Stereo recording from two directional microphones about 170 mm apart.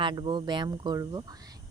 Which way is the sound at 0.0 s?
25° right (ahead or behind).